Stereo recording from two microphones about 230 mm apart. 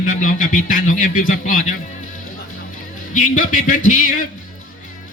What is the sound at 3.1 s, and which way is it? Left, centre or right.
A man's voice, left.